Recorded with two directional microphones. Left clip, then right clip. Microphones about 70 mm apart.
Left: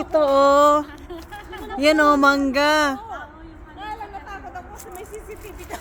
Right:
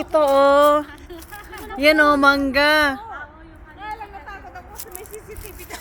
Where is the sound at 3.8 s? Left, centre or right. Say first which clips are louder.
Even; left.